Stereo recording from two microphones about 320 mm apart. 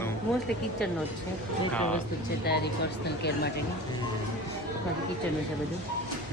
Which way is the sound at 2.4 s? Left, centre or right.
Left.